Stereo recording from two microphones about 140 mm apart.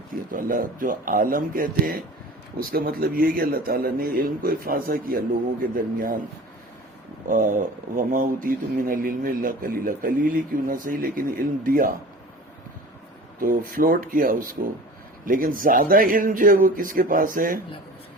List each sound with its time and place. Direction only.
0.3 s a man's voice: 85° right
7.3 s speech: 70° right (ahead or behind)
13.4 s speech: 75° right (ahead or behind)